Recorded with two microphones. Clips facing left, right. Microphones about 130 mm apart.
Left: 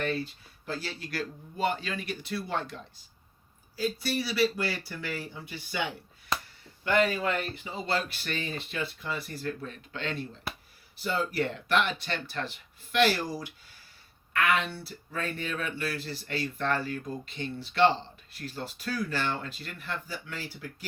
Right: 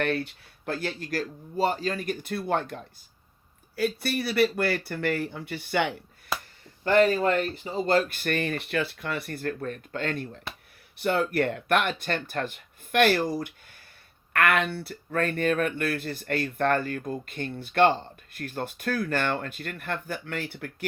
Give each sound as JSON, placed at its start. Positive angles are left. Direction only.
{"t": 0.0, "sound": "speech", "side_deg": -65}
{"t": 6.8, "sound": "speech", "side_deg": -40}
{"t": 10.5, "sound": "a sound", "side_deg": 5}
{"t": 10.9, "sound": "speech", "side_deg": -60}